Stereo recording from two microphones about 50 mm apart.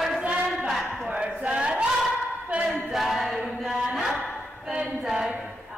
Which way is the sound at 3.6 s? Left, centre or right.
Centre.